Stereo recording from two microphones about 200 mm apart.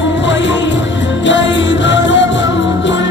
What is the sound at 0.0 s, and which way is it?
Music, 65° left (ahead or behind).